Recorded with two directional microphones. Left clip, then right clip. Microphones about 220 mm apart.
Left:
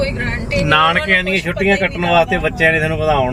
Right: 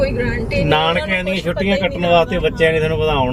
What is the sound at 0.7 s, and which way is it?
Speech, 5° left (ahead or behind).